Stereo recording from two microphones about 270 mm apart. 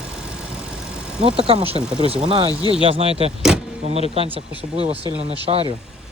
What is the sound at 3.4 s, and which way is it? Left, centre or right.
Vehicle, centre.